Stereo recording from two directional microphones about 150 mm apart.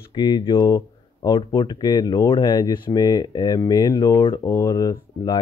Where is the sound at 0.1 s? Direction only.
30° left (ahead or behind).